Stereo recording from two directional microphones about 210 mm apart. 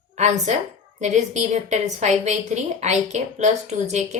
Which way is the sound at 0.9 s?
35° right (ahead or behind).